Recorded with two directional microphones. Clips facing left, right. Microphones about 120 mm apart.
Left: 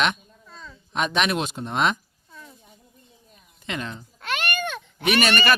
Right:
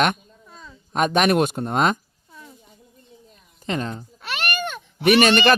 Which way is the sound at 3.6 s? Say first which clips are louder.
Right 5 dB; 35° right (ahead or behind).